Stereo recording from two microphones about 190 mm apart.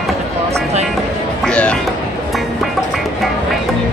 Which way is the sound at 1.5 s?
5° left (ahead or behind).